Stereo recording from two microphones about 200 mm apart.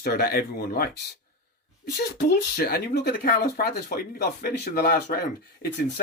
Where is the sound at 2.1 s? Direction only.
50° left (ahead or behind).